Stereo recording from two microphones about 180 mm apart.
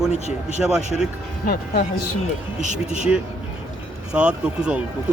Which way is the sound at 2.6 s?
40° right (ahead or behind).